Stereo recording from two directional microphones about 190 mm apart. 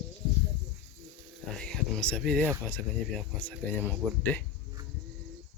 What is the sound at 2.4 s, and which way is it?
Speech, 10° right (ahead or behind).